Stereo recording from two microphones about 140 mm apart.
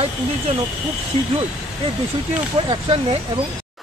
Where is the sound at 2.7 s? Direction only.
40° right (ahead or behind).